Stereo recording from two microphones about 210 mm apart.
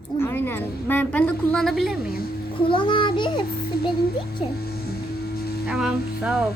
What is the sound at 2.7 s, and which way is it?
Speech, 25° left (ahead or behind).